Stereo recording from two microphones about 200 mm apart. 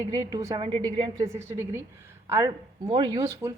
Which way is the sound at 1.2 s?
15° right (ahead or behind).